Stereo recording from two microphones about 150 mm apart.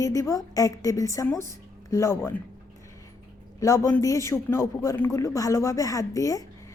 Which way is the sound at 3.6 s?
20° left (ahead or behind).